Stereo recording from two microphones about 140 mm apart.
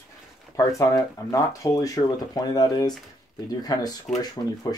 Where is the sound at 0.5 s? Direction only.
25° left (ahead or behind).